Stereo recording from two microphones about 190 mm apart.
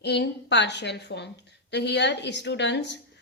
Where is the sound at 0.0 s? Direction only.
65° left (ahead or behind).